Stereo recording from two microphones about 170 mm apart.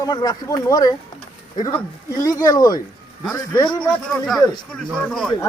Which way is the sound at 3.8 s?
Centre (ahead or behind).